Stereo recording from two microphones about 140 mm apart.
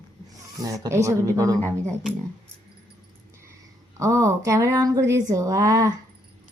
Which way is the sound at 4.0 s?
20° right (ahead or behind).